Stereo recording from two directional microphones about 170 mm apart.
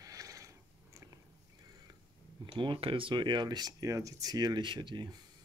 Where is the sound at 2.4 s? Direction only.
30° right (ahead or behind).